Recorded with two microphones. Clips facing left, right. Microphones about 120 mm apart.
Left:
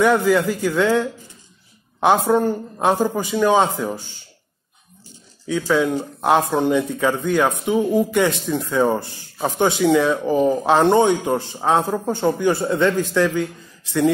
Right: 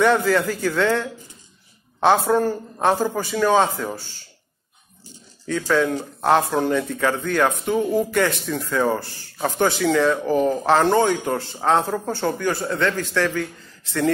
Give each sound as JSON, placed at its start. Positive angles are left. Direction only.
{"t": 0.0, "sound": "speech", "side_deg": 10}
{"t": 5.5, "sound": "speech", "side_deg": 10}